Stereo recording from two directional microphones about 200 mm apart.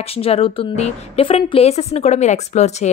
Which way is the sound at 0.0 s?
30° left (ahead or behind).